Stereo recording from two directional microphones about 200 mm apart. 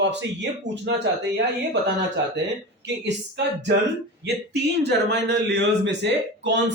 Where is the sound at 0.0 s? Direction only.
60° right (ahead or behind).